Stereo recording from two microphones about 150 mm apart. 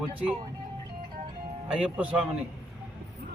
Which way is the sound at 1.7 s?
5° right (ahead or behind).